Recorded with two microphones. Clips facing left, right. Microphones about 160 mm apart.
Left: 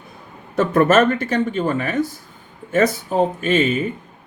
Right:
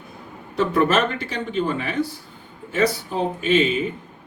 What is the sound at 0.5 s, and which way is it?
Speech, 50° left (ahead or behind).